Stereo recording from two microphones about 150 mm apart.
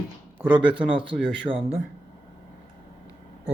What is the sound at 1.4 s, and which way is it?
Speech, 40° right (ahead or behind).